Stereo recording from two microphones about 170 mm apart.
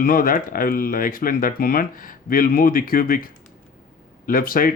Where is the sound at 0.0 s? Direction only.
55° left (ahead or behind).